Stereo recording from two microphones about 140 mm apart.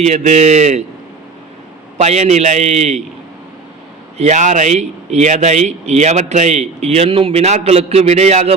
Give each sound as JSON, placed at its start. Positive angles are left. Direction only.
{"t": 0.0, "sound": "speech", "side_deg": -55}
{"t": 2.0, "sound": "speech", "side_deg": -55}
{"t": 4.2, "sound": "speech", "side_deg": -55}